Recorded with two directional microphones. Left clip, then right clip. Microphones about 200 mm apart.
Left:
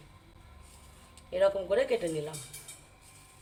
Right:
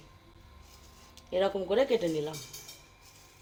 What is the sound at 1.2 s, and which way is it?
Speech, 30° right (ahead or behind).